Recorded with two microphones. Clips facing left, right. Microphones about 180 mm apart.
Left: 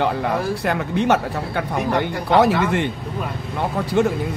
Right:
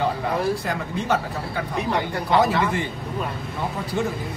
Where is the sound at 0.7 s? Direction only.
70° left (ahead or behind).